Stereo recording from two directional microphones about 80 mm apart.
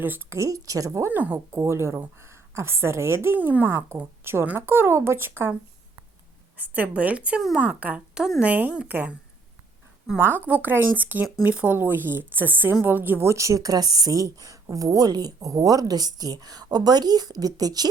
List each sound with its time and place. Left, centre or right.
0.0 s speech: right
0.3 s a woman's voice: right
1.1 s speech: right
1.5 s a woman's voice: right
6.6 s speech: centre
10.2 s a woman's voice: right